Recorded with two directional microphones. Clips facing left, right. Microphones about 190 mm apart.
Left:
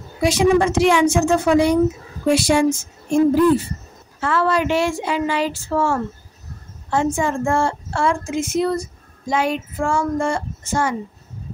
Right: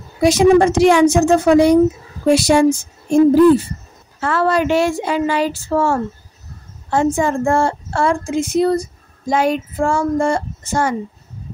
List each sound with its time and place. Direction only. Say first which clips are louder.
0.2 s a woman's voice: right 5 dB; 40° right (ahead or behind)